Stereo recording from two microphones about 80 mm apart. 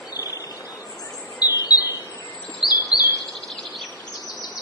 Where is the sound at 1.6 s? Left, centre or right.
Left.